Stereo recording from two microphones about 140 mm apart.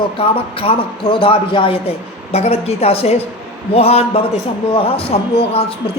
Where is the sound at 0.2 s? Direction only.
40° left (ahead or behind).